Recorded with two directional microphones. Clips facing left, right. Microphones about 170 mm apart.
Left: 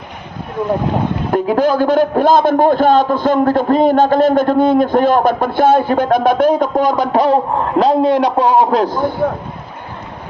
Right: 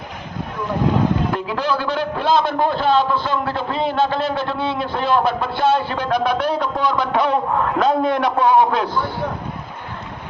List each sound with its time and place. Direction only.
1.3 s a man's voice: 45° left (ahead or behind)